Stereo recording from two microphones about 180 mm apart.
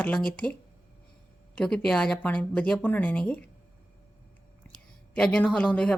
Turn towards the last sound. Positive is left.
turn(degrees=5)  # may be behind; listen again after turning